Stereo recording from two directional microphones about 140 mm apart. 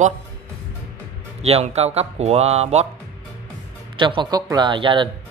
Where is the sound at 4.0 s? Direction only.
35° right (ahead or behind).